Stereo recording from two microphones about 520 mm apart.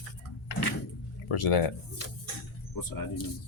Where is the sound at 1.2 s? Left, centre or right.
Left.